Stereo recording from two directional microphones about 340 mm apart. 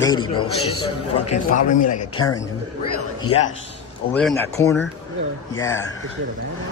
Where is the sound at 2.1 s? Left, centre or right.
Centre.